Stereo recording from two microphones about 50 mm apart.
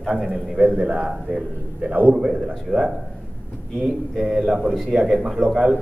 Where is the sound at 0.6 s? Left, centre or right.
Right.